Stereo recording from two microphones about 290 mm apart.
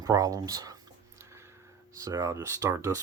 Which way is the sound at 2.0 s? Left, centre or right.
Centre.